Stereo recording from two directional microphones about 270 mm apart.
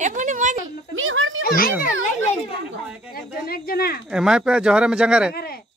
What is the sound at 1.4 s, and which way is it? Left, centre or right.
Children playing, left.